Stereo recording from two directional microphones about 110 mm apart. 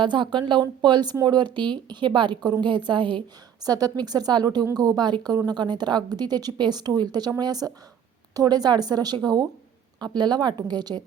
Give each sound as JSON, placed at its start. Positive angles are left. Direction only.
{"t": 0.0, "sound": "a woman's voice", "side_deg": -45}